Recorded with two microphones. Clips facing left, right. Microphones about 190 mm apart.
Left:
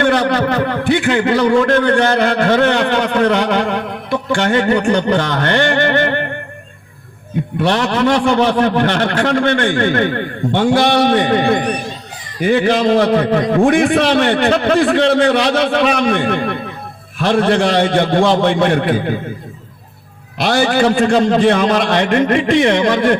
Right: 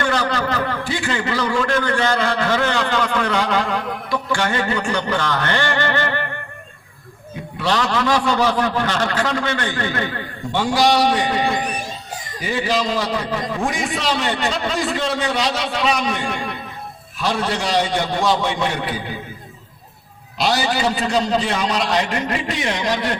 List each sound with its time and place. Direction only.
0.0 s a man's voice: 60° left (ahead or behind)
7.6 s a man's voice: 60° left (ahead or behind)
20.4 s a man's voice: 55° left (ahead or behind)